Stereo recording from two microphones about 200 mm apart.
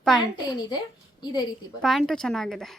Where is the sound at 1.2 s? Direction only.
20° left (ahead or behind).